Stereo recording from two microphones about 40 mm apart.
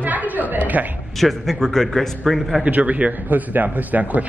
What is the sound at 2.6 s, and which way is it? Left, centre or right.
A man's voice, right.